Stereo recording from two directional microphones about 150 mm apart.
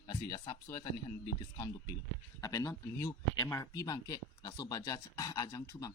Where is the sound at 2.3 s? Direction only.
25° left (ahead or behind).